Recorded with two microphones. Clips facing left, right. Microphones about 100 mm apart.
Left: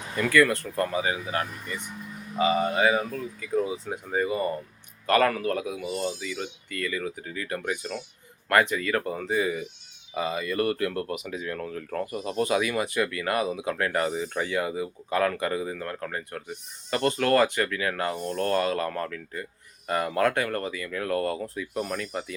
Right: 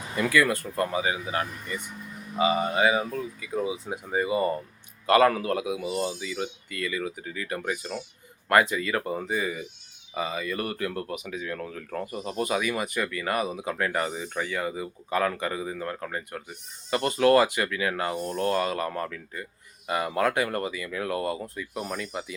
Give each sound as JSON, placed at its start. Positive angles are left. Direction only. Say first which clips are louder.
{"t": 0.2, "sound": "speech", "louder": "left 2 dB", "side_deg": -10}
{"t": 6.0, "sound": "speech", "louder": "right 1 dB", "side_deg": -5}
{"t": 20.4, "sound": "speech", "louder": "right 1 dB", "side_deg": -15}